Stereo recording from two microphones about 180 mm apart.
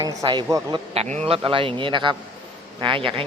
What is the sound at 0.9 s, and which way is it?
A woman's voice, 35° right (ahead or behind).